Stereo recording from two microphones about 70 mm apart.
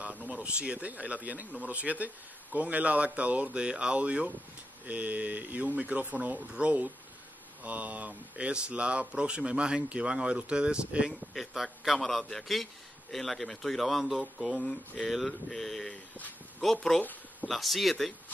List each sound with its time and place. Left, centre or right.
0.0 s speech: centre
11.3 s a man's voice: centre
17.0 s a sound: left
17.5 s a man's voice: centre